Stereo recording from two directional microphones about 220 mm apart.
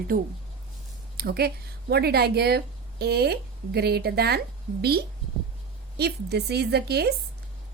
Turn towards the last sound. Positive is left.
turn(degrees=-45)  # may be behind; listen again after turning